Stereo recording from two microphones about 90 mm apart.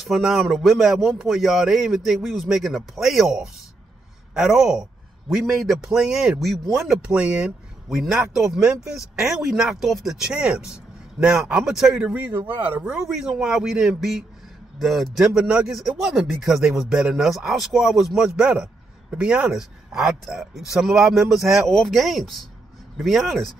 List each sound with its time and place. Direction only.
0.0 s a man's voice: 5° right (ahead or behind); by 12.8 s 20° right (ahead or behind)
12.8 s speech: 5° right (ahead or behind)